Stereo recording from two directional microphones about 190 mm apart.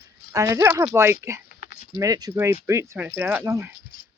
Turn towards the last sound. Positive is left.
turn(degrees=-15)  # may be behind; listen again after turning